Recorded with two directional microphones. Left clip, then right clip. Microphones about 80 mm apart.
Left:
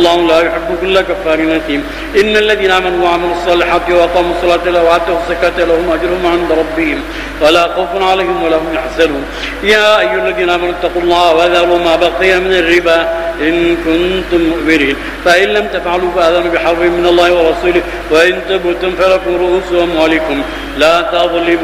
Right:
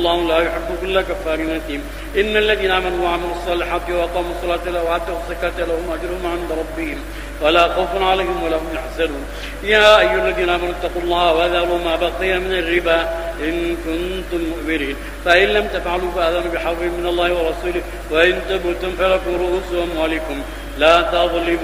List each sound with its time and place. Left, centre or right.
0.0 s a man's voice: left